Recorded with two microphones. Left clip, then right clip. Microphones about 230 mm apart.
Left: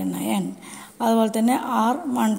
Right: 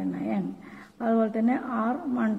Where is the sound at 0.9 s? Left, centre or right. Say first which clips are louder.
Left 5 dB; left.